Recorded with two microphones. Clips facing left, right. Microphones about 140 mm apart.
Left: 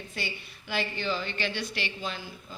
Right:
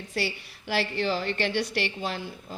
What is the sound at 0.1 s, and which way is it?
A woman's voice, 80° right.